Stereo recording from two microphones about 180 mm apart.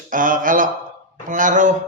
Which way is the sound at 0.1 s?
50° right (ahead or behind).